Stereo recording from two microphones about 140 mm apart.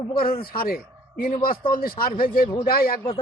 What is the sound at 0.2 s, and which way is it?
Speech, 90° left.